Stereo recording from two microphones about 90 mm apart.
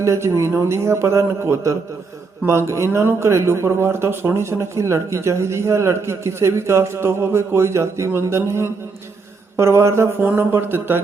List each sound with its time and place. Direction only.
0.0 s speech: 35° right (ahead or behind)